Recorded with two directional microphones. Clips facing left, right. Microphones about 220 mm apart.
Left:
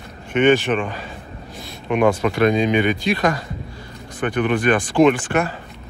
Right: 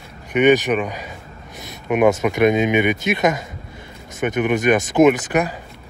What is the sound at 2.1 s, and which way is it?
Speech, 20° right (ahead or behind).